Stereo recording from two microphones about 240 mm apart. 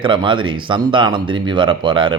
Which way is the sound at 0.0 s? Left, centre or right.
Centre.